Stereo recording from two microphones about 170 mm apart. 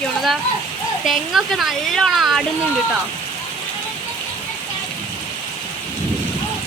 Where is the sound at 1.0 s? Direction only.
Centre (ahead or behind).